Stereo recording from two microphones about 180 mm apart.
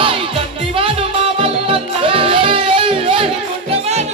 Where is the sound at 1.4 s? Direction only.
30° right (ahead or behind).